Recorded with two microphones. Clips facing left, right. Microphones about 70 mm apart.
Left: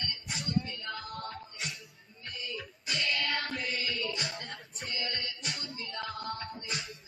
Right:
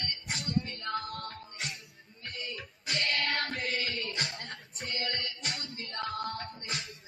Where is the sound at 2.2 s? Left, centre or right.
Right.